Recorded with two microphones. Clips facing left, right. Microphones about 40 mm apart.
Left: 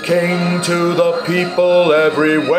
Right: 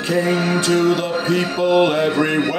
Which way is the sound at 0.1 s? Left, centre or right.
Left.